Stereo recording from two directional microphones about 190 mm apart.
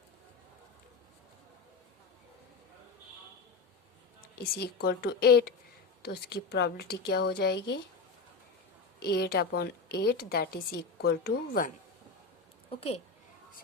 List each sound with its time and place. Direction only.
4.4 s a woman's voice: 55° left (ahead or behind)
9.0 s a woman's voice: 55° left (ahead or behind)
12.7 s a woman's voice: 30° left (ahead or behind)